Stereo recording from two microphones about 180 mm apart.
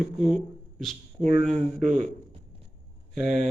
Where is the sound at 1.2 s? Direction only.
40° right (ahead or behind).